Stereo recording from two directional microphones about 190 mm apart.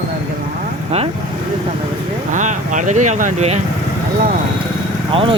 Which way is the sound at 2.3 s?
40° right (ahead or behind).